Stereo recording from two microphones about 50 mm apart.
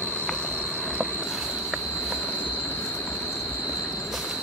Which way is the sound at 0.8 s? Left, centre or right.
Right.